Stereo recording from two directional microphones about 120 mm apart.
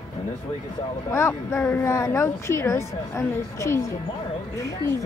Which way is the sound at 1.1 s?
25° left (ahead or behind).